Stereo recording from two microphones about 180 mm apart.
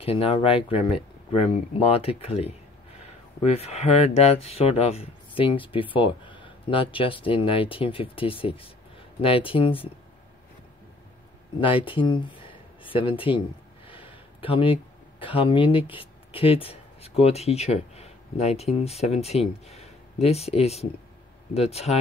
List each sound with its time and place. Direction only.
0.0 s speech: 30° left (ahead or behind)
11.6 s speech: 30° left (ahead or behind)
12.4 s a sound: 30° left (ahead or behind)
13.8 s speech: 30° left (ahead or behind)